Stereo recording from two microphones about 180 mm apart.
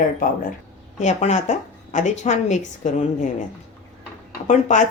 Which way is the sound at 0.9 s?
40° left (ahead or behind).